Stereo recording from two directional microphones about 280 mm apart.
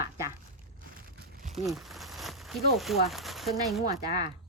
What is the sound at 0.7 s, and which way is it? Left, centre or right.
Crumpling, right.